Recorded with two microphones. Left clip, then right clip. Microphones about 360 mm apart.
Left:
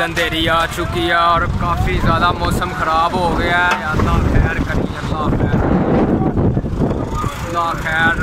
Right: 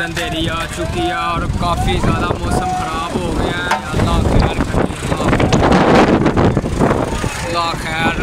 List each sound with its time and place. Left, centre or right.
0.2 s speech: centre
5.3 s vehicle: right
7.5 s speech: centre